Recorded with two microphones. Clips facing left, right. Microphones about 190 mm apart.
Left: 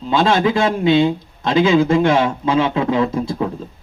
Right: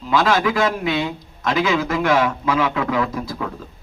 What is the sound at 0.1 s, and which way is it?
A man's voice, 25° left (ahead or behind).